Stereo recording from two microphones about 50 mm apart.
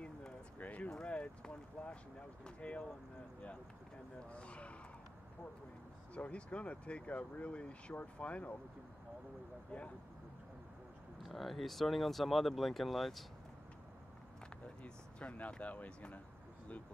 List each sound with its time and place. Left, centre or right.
0.6 s clip-clop: left
0.8 s speech: centre
4.3 s a sound: left
6.1 s speech: left
11.2 s speech: centre
14.8 s a sound: left
15.6 s speech: left